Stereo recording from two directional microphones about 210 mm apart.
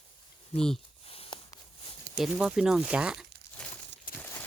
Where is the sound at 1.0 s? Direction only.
25° left (ahead or behind).